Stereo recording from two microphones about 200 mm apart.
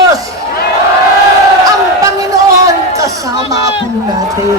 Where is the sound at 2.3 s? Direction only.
15° right (ahead or behind).